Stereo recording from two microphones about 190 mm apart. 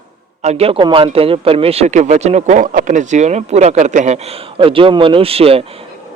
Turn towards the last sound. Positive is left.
turn(degrees=-30)  # may be behind; listen again after turning